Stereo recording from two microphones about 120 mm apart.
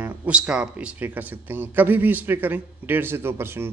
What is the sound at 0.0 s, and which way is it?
Speech, 10° right (ahead or behind).